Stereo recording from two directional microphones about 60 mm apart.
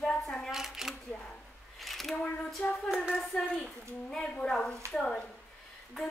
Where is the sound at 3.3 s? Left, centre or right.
Centre.